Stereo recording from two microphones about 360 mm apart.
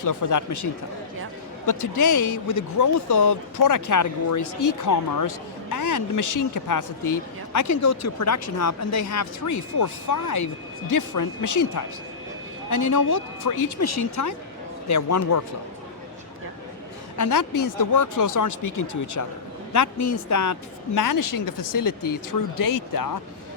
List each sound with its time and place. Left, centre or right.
0.0 s speech: left
1.6 s speech: left
17.2 s speech: left